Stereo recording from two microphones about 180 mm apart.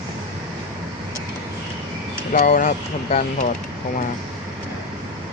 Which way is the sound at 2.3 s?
45° left (ahead or behind).